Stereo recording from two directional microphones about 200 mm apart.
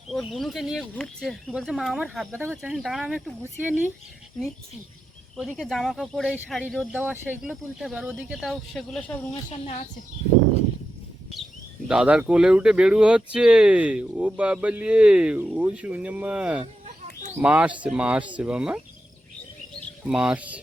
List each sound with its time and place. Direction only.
0.1 s speech: centre (ahead or behind)
5.4 s speech: centre (ahead or behind)
9.5 s speech: 35° left (ahead or behind)
11.9 s speech: 5° right (ahead or behind)
20.1 s speech: 5° right (ahead or behind)